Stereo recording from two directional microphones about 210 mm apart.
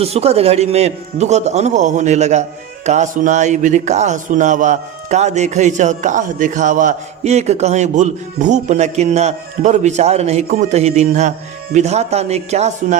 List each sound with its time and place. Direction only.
0.0 s a man's voice: 30° right (ahead or behind)